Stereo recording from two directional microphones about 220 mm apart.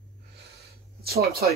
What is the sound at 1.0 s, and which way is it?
Speech, 45° right (ahead or behind).